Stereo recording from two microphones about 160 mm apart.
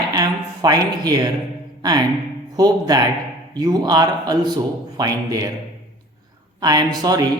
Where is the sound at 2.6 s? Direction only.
25° right (ahead or behind).